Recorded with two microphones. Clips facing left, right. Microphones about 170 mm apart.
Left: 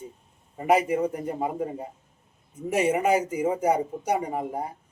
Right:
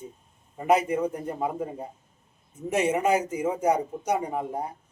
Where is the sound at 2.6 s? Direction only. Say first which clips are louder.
Left 1 dB; 10° left (ahead or behind).